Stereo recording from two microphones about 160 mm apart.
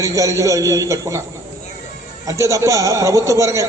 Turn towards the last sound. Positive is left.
turn(degrees=-20)  # may be behind; listen again after turning